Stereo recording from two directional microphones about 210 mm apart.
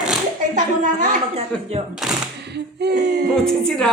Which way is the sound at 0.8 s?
40° right (ahead or behind).